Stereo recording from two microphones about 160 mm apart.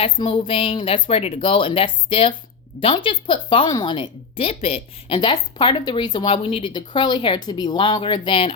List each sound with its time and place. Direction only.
0.0 s speech: 35° left (ahead or behind)